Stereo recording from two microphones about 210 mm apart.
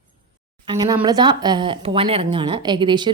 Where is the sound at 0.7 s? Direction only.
20° right (ahead or behind).